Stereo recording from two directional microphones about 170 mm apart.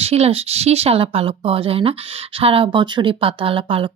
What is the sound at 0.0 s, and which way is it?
Speech, 35° right (ahead or behind).